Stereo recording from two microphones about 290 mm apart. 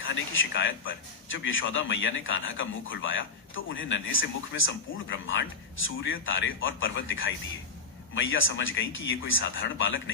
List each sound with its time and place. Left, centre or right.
0.1 s a man's voice: left